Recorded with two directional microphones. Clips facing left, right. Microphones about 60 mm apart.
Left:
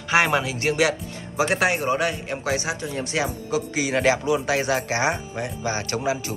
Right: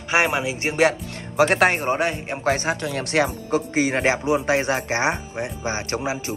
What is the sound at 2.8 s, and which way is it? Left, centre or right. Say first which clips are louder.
Speech: right 4 dB; right.